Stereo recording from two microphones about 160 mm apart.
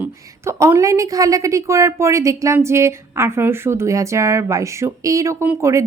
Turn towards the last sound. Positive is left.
turn(degrees=-15)  # may be behind; listen again after turning